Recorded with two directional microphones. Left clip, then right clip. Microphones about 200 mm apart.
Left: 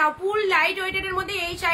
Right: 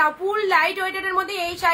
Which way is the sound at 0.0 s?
20° left (ahead or behind).